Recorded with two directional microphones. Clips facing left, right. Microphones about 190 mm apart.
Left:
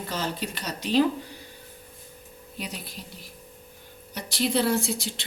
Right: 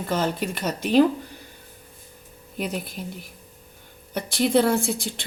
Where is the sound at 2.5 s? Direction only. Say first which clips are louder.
Right 8 dB; 50° right (ahead or behind).